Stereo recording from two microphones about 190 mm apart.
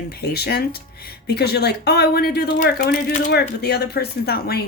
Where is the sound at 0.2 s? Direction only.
55° left (ahead or behind).